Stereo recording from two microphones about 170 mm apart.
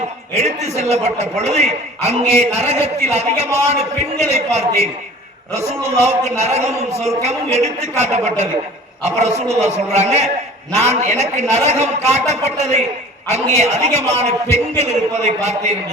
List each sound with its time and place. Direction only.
0.3 s a man's voice: 40° right (ahead or behind)